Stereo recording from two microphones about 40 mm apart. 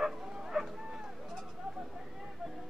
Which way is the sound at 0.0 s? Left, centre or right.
Centre.